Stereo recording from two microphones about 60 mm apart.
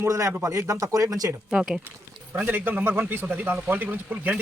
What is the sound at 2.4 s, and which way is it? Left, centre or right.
Speech, right.